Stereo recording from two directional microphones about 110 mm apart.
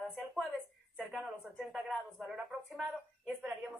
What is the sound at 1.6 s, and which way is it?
A woman's voice, centre (ahead or behind).